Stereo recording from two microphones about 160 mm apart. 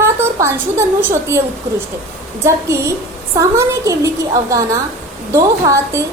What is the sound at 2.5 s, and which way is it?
A woman's voice, 15° right (ahead or behind).